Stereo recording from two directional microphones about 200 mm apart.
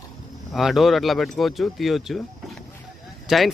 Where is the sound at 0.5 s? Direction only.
Centre (ahead or behind).